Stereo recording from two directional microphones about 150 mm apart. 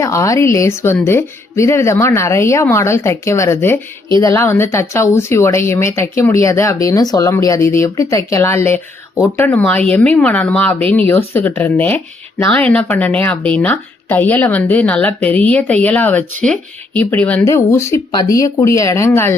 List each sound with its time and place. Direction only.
0.0 s speech: 20° left (ahead or behind)